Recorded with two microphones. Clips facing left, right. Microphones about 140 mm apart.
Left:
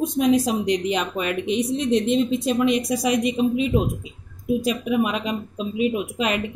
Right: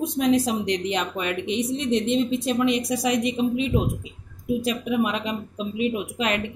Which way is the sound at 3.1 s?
30° right (ahead or behind).